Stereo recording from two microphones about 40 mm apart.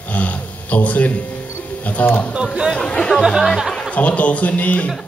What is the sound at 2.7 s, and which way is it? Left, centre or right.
Speech, left.